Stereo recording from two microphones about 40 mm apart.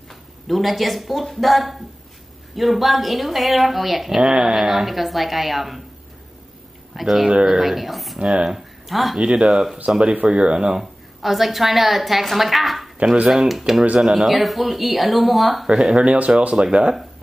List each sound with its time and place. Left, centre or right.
0.1 s speech: centre
7.0 s speech: centre
9.2 s speech: right
10.8 s a woman's voice: centre
15.6 s speech: centre
16.0 s speech: right